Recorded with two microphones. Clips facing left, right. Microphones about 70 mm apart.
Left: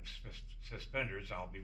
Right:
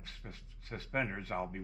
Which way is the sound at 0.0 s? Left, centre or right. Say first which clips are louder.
Right 4 dB; right.